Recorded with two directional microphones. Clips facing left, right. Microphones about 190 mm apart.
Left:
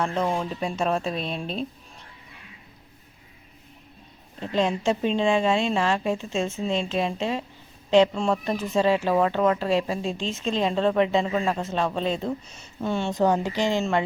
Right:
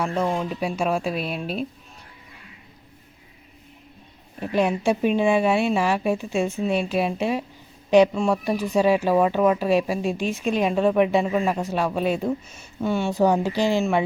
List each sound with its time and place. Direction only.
0.0 s speech: 5° right (ahead or behind)
4.4 s speech: 15° right (ahead or behind)